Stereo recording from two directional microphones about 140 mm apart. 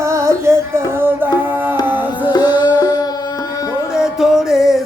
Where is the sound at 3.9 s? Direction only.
5° right (ahead or behind).